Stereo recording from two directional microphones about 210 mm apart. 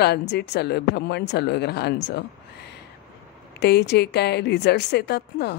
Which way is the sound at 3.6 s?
55° left (ahead or behind).